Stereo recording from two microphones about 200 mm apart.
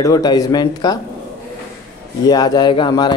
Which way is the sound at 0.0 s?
20° left (ahead or behind).